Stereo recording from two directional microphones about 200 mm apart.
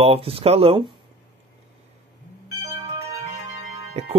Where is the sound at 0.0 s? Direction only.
30° right (ahead or behind).